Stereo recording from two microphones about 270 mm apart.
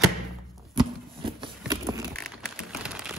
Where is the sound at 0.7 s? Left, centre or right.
Centre.